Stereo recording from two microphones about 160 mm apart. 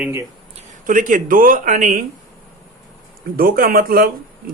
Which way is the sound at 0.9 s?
55° right (ahead or behind).